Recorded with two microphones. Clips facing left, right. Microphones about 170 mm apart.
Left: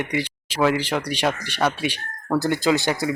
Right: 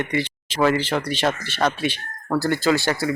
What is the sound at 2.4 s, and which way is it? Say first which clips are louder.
Speech: right 1 dB; 15° left (ahead or behind).